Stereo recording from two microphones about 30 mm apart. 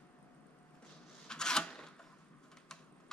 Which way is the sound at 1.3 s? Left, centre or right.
Left.